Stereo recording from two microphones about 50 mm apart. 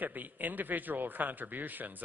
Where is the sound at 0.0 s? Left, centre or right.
Right.